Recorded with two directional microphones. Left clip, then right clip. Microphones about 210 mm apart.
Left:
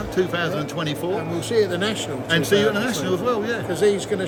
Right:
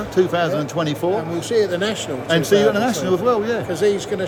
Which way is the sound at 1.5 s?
25° left (ahead or behind).